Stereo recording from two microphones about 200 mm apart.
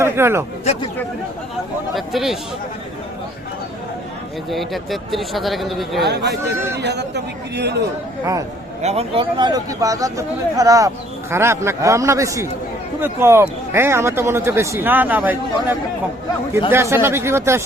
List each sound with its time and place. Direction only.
0.0 s speech: 10° right (ahead or behind)
0.6 s chatter: 30° left (ahead or behind)
2.0 s speech: centre (ahead or behind)
4.4 s speech: centre (ahead or behind)
6.0 s a man's voice: 55° right (ahead or behind)
6.4 s speech: 15° right (ahead or behind)
6.7 s a man's voice: 55° right (ahead or behind)
8.8 s speech: 30° right (ahead or behind); by 17.6 s 15° right (ahead or behind)